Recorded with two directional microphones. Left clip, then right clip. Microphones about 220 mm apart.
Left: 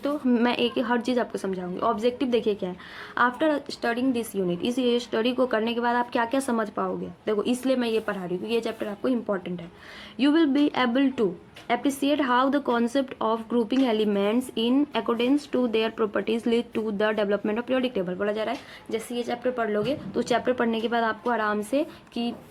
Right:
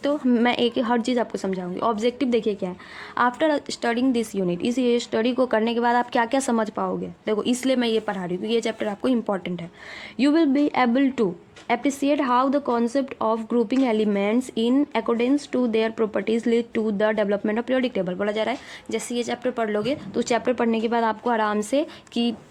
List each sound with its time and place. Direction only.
0.0 s speech: 30° right (ahead or behind)
10.2 s speech: 25° right (ahead or behind); by 22.4 s 45° right (ahead or behind)